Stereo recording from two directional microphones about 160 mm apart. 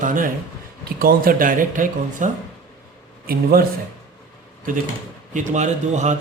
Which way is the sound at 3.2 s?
70° right (ahead or behind).